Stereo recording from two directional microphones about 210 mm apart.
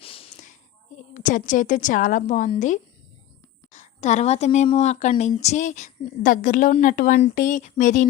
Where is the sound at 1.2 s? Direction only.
40° left (ahead or behind).